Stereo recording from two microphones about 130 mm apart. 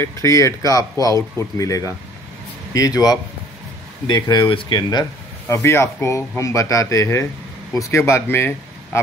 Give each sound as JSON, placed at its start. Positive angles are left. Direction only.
{"t": 0.0, "sound": "speech", "side_deg": 25}
{"t": 5.5, "sound": "speech", "side_deg": 20}